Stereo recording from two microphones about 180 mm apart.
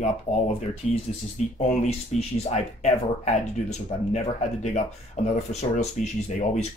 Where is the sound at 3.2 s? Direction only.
40° left (ahead or behind).